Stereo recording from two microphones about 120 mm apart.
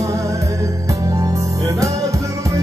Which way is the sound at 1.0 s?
30° right (ahead or behind).